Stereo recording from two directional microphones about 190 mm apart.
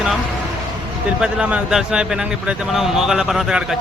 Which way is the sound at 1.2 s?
5° right (ahead or behind).